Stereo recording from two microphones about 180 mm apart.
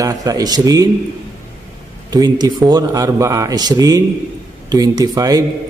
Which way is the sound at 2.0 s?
20° right (ahead or behind).